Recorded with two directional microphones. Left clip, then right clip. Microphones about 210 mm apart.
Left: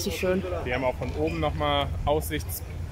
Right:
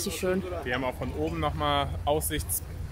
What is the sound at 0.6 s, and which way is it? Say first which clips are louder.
Speech: left 3 dB; 35° right (ahead or behind).